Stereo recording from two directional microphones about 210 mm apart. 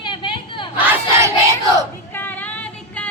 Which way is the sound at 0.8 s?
15° right (ahead or behind).